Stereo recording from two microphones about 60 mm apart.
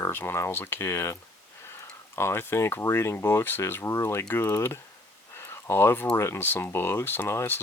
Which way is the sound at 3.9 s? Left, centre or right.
Left.